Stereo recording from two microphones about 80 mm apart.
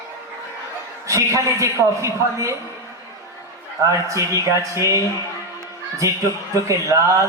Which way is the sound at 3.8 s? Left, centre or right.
Right.